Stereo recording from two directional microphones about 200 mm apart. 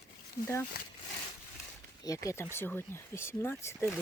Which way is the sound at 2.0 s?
15° left (ahead or behind).